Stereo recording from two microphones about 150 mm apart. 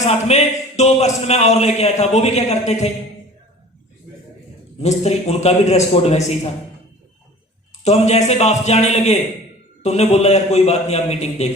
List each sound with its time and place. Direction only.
0.0 s speech: 45° left (ahead or behind)
4.8 s speech: 45° left (ahead or behind)
7.9 s speech: 45° left (ahead or behind)